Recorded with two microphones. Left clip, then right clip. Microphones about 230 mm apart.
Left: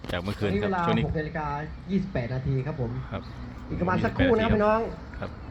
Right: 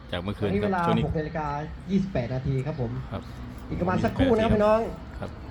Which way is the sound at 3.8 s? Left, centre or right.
Right.